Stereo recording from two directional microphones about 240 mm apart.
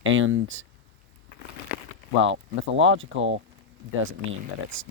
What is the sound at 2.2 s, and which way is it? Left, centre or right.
Speech, right.